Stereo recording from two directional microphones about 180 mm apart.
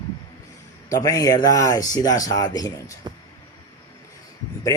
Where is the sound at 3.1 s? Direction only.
25° right (ahead or behind).